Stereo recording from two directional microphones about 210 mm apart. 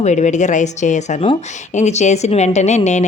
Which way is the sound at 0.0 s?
35° left (ahead or behind).